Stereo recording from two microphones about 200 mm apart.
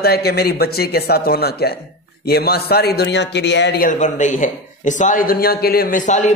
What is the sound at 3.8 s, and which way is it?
A man's voice, 40° left (ahead or behind).